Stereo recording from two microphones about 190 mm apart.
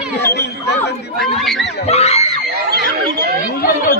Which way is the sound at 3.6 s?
50° left (ahead or behind).